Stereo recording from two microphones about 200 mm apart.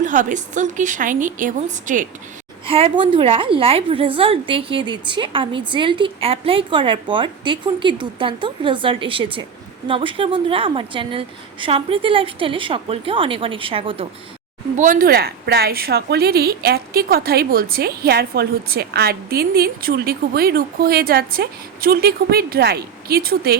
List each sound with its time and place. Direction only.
0.0 s a woman's voice: 40° right (ahead or behind)
2.6 s a woman's voice: 30° right (ahead or behind)
14.8 s a woman's voice: 45° right (ahead or behind)